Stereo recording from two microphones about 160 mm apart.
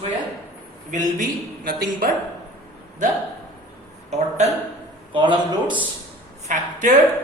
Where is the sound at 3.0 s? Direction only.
50° right (ahead or behind).